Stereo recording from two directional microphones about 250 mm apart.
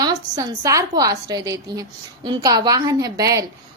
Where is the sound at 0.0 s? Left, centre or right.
Centre.